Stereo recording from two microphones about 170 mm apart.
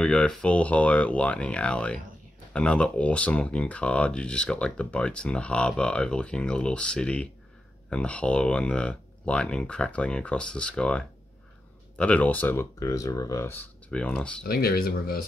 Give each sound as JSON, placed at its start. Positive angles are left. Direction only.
{"t": 0.0, "sound": "speech", "side_deg": 5}
{"t": 14.4, "sound": "speech", "side_deg": 60}